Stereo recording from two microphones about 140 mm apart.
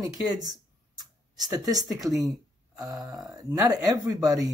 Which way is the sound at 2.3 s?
25° right (ahead or behind).